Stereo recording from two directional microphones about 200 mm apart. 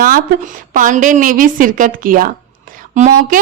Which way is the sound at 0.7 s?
40° right (ahead or behind).